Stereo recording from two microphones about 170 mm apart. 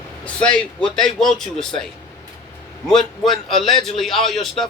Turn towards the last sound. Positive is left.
turn(degrees=0)  # may be behind; listen again after turning